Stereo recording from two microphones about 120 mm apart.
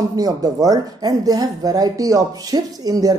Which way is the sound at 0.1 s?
30° right (ahead or behind).